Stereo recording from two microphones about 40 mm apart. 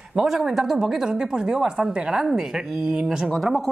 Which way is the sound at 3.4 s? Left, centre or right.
Centre.